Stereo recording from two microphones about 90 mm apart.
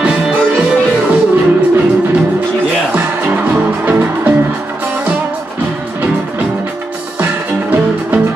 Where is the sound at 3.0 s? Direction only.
20° right (ahead or behind).